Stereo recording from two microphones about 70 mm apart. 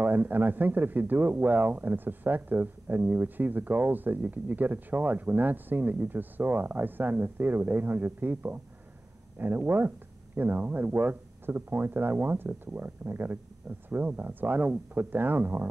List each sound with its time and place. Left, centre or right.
0.0 s speech: right